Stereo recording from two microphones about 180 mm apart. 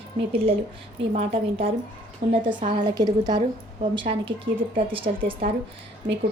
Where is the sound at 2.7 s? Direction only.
25° right (ahead or behind).